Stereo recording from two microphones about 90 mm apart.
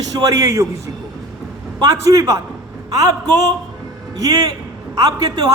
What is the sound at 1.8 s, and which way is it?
A man's voice, 40° right (ahead or behind).